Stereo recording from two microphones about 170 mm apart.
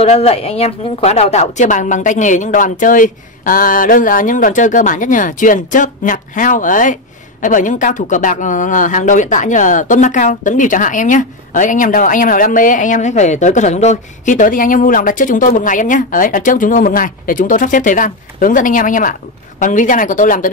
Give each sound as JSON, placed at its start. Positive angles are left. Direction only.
{"t": 0.0, "sound": "speech", "side_deg": 40}